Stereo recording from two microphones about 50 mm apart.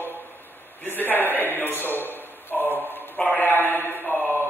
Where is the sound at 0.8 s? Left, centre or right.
Left.